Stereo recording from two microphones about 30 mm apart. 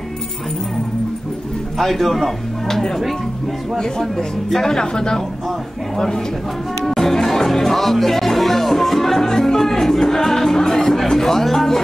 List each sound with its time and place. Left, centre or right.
1.8 s a man's voice: centre
4.7 s a woman's voice: left
6.9 s music: centre
7.4 s speech: centre